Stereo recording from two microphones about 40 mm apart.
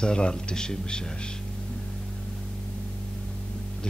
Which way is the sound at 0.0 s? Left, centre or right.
Left.